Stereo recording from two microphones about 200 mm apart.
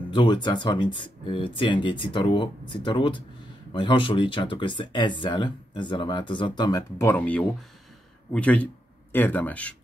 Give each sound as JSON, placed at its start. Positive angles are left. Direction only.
{"t": 0.1, "sound": "speech", "side_deg": 25}